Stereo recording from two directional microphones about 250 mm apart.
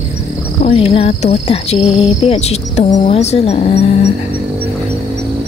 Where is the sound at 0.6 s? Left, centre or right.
Left.